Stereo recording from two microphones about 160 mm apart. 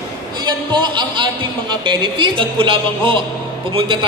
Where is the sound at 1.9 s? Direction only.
30° right (ahead or behind).